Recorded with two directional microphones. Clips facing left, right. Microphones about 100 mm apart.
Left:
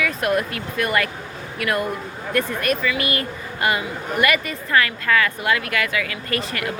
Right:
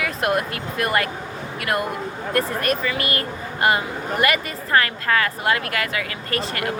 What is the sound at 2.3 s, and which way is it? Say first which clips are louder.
A woman's voice: even; 35° right (ahead or behind).